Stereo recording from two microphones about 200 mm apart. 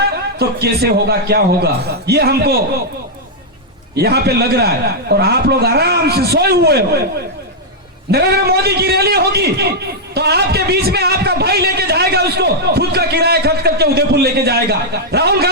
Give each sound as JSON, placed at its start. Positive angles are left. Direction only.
{"t": 0.3, "sound": "a man's voice", "side_deg": -55}
{"t": 3.9, "sound": "a man's voice", "side_deg": -55}
{"t": 8.1, "sound": "a man's voice", "side_deg": -55}